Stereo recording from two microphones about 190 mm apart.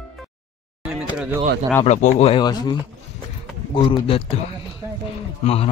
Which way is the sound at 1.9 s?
35° left (ahead or behind).